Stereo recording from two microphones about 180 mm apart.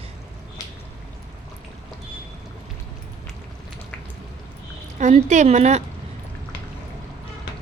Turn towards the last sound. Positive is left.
turn(degrees=-40)  # may be behind; listen again after turning